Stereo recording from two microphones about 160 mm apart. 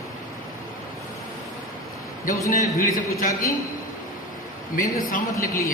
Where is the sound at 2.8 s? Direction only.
60° left (ahead or behind).